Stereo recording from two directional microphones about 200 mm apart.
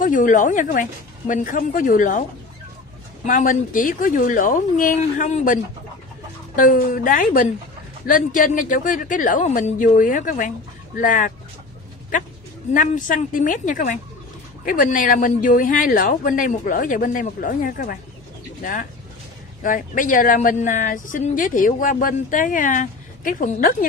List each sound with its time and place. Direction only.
0.0 s speech: 40° left (ahead or behind)
3.3 s speech: 40° left (ahead or behind)
12.7 s speech: 40° left (ahead or behind)